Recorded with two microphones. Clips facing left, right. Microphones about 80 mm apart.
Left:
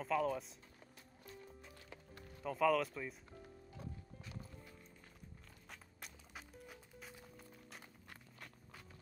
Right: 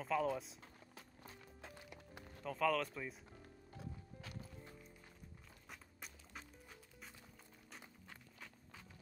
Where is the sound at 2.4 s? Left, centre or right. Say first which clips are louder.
Left 3 dB; centre.